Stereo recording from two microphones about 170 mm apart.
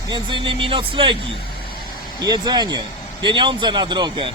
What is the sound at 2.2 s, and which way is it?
Speech, 25° right (ahead or behind).